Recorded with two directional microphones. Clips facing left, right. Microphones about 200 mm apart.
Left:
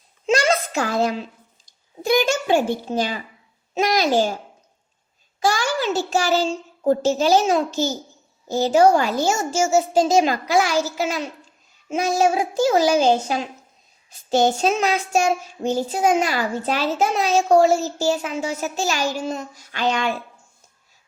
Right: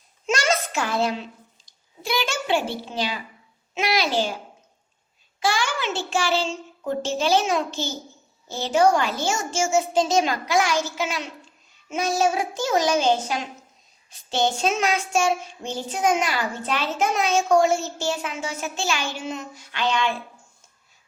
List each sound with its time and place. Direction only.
0.3 s a sound: 35° left (ahead or behind)
2.0 s a child's voice: 45° left (ahead or behind)
5.4 s child singing: 40° left (ahead or behind)